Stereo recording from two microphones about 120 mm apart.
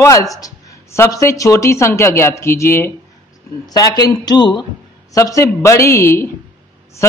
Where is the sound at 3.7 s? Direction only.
30° left (ahead or behind).